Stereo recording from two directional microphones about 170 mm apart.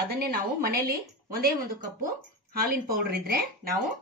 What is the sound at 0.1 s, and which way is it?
A woman's voice, 65° right (ahead or behind).